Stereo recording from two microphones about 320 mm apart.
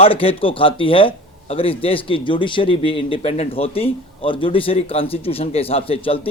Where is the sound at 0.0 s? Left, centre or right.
Centre.